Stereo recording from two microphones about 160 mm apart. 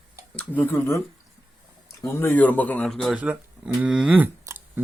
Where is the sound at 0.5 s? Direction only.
15° left (ahead or behind).